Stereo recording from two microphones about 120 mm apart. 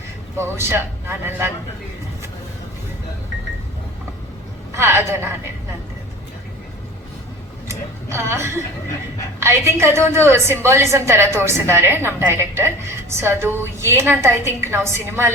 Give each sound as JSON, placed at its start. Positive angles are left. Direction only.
{"t": 0.3, "sound": "a woman's voice", "side_deg": -20}
{"t": 4.7, "sound": "a woman's voice", "side_deg": -20}
{"t": 7.7, "sound": "a woman's voice", "side_deg": -20}